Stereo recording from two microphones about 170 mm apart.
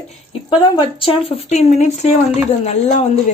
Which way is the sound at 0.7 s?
30° left (ahead or behind).